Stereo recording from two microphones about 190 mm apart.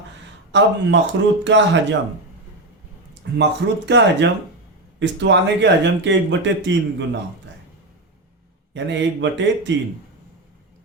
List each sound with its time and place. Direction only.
0.5 s speech: 70° right (ahead or behind)
3.3 s speech: 65° right (ahead or behind)
8.7 s speech: 70° right (ahead or behind)